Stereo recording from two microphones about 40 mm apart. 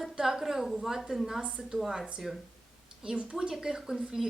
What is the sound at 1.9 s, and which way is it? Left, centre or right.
Speech, right.